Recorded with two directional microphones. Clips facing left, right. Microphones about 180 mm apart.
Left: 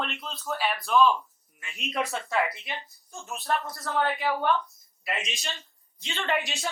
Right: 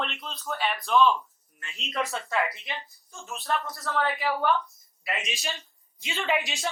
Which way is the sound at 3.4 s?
Centre (ahead or behind).